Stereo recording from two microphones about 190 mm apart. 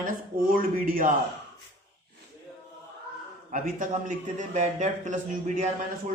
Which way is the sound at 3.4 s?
45° right (ahead or behind).